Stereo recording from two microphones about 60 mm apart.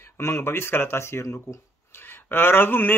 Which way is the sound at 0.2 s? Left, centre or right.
Left.